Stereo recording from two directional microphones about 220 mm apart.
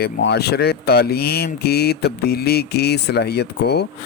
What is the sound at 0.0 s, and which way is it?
Speech, 50° left (ahead or behind).